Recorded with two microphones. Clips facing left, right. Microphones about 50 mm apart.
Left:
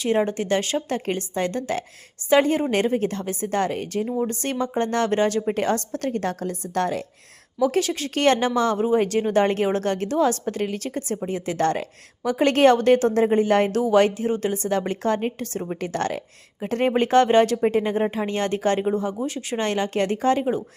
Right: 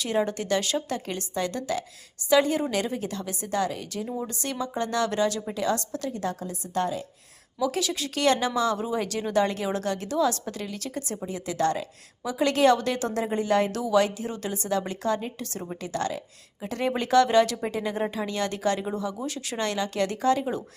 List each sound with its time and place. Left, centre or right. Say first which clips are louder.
0.0 s a woman's voice: left 5 dB; left
7.6 s a woman's voice: left 6 dB; left